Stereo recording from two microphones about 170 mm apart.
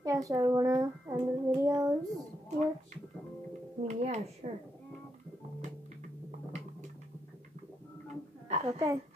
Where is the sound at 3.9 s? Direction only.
40° right (ahead or behind).